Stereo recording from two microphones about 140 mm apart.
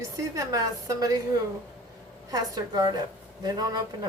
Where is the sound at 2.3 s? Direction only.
25° right (ahead or behind).